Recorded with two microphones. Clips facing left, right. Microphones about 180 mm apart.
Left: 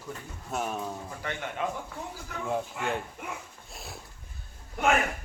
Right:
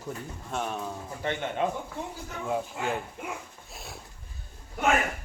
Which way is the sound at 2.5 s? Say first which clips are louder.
Right 1 dB; centre (ahead or behind).